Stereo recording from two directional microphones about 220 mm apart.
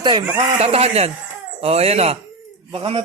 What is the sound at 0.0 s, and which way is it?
Speech, 20° right (ahead or behind).